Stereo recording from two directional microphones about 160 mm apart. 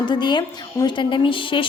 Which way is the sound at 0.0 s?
30° left (ahead or behind).